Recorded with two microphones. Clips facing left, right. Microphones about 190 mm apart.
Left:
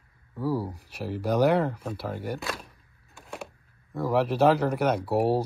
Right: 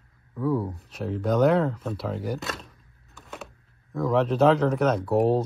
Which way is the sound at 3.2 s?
Centre (ahead or behind).